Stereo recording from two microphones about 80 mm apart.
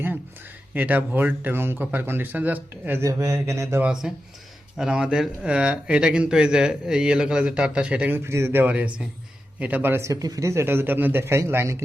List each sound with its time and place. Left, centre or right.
0.7 s speech: right
3.0 s a man's voice: right
4.0 s speech: centre
8.1 s a man's voice: right
8.6 s speech: centre
10.1 s a man's voice: right